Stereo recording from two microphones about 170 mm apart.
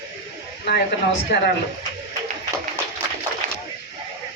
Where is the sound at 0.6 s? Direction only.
75° left (ahead or behind).